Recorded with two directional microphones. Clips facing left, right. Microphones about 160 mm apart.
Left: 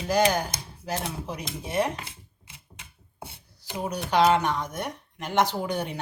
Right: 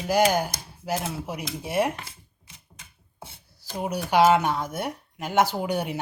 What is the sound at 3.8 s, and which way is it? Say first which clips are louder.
Speech: right 2 dB; 10° right (ahead or behind).